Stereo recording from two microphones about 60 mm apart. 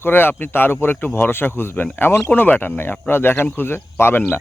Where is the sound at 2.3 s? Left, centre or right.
Left.